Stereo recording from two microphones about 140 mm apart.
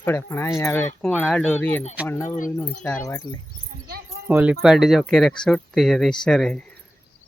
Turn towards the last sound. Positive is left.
turn(degrees=5)  # may be behind; listen again after turning